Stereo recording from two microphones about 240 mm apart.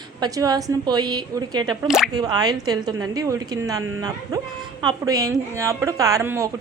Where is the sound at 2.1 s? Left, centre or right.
Centre.